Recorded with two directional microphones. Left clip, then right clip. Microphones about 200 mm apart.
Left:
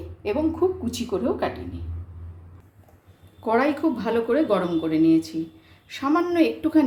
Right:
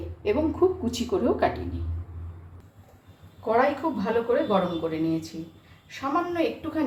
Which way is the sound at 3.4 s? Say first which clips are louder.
Left 1 dB; 55° left (ahead or behind).